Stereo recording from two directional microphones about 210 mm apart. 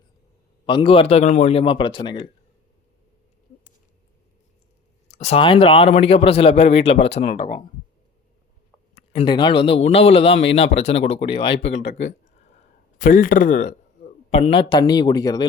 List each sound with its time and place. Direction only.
0.6 s speech: 25° left (ahead or behind)
5.0 s speech: 30° left (ahead or behind)
9.0 s speech: 25° left (ahead or behind)
11.8 s speech: 60° left (ahead or behind)
13.0 s a man's voice: 40° left (ahead or behind); by 15.4 s 20° left (ahead or behind)